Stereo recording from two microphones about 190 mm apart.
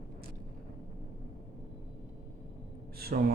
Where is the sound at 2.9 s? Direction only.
55° right (ahead or behind).